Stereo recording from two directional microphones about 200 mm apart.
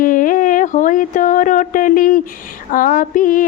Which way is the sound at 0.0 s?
45° left (ahead or behind).